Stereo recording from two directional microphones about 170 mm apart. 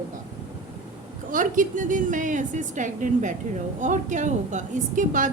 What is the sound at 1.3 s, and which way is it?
A woman's voice, 50° right (ahead or behind).